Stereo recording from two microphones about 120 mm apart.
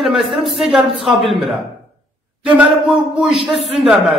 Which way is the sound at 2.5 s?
10° right (ahead or behind).